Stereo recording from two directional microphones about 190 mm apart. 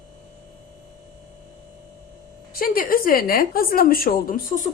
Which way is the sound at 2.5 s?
50° left (ahead or behind).